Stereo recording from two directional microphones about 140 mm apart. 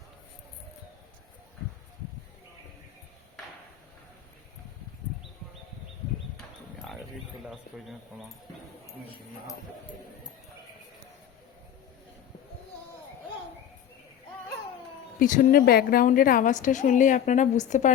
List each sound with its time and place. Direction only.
7.4 s speech: 5° right (ahead or behind)
15.2 s a woman's voice: 70° left (ahead or behind)